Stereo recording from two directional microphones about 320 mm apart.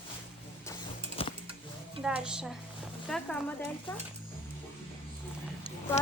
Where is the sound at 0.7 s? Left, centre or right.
Centre.